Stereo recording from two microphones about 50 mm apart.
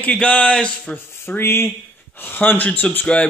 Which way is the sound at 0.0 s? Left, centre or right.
Left.